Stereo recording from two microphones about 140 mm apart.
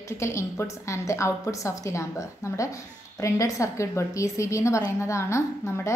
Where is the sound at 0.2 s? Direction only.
20° left (ahead or behind).